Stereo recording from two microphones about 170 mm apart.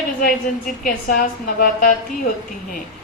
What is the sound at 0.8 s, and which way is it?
A woman's voice, 55° left (ahead or behind).